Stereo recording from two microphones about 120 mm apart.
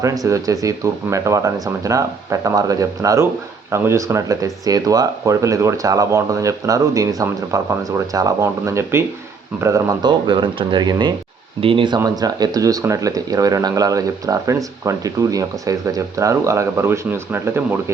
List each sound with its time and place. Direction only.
0.3 s speech: 30° right (ahead or behind)
10.2 s speech: 40° right (ahead or behind)
11.9 s speech: 30° right (ahead or behind)